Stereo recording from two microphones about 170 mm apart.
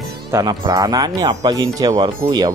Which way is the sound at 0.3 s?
25° right (ahead or behind).